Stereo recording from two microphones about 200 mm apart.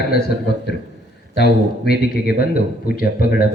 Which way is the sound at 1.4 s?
50° left (ahead or behind).